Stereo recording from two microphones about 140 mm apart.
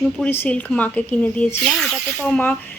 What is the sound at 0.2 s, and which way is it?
Speech, 15° left (ahead or behind).